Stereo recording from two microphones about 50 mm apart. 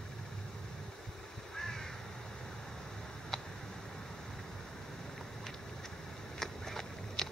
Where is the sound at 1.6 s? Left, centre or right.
Centre.